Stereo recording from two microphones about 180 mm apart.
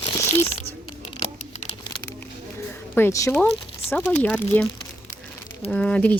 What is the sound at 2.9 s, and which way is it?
Speech, 15° left (ahead or behind).